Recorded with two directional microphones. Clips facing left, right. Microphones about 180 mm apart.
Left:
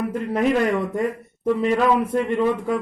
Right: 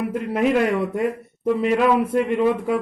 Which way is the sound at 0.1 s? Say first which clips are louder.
Right 1 dB; 5° right (ahead or behind).